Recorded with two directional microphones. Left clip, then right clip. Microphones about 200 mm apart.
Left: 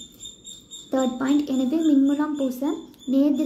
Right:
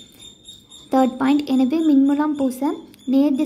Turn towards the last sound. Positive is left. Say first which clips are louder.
# right 3 dB
turn(degrees=-25)  # may be behind; listen again after turning